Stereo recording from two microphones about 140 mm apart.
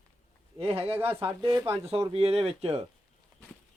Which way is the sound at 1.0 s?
15° right (ahead or behind).